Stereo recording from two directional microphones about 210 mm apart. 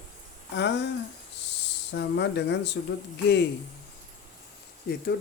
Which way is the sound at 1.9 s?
55° left (ahead or behind).